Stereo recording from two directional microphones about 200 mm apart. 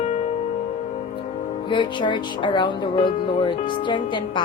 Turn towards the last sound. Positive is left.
turn(degrees=25)  # may be behind; listen again after turning